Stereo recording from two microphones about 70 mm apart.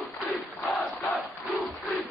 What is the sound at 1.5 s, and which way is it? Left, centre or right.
Battle cry, centre.